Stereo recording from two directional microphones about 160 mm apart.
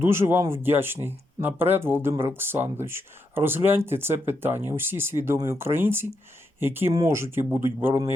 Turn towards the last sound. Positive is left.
turn(degrees=-15)  # may be behind; listen again after turning